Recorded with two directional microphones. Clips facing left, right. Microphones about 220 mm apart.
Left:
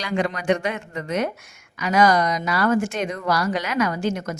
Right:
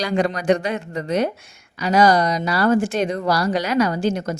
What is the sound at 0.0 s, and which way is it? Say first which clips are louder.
A woman's voice: right 4 dB; 35° right (ahead or behind).